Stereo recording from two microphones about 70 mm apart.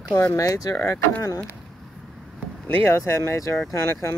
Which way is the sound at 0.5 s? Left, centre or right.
Left.